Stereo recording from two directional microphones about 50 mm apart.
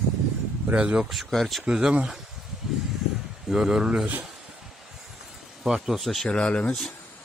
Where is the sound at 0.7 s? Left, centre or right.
Centre.